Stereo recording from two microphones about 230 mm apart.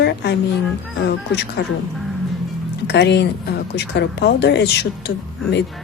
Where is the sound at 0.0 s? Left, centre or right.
Left.